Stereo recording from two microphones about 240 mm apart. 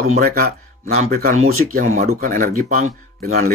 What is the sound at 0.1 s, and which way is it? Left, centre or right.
Speech, right.